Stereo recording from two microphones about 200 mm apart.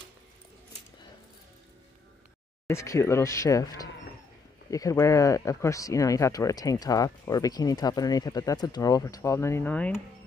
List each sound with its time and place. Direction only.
2.6 s speech: 15° left (ahead or behind)